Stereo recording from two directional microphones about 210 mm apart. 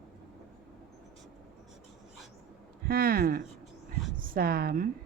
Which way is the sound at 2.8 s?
45° right (ahead or behind).